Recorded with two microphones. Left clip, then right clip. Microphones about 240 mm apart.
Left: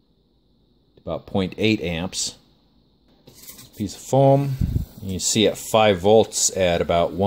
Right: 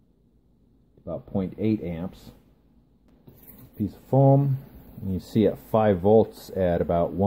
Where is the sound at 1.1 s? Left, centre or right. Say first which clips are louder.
Left 6 dB; left.